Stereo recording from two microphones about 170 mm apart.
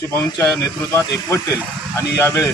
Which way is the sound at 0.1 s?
20° left (ahead or behind).